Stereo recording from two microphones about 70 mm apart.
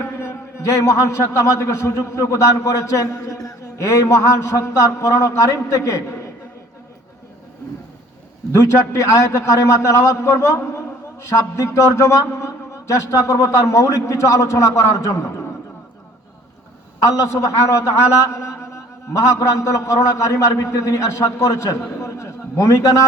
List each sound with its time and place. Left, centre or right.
0.2 s a man's voice: left
8.5 s a man's voice: left
17.0 s a man's voice: left